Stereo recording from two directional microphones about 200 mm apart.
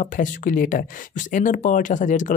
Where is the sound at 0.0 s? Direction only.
40° left (ahead or behind).